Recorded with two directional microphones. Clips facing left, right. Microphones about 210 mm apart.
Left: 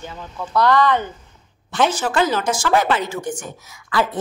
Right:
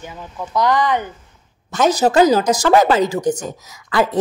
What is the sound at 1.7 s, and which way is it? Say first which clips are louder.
A woman's voice: right 5 dB; 40° right (ahead or behind).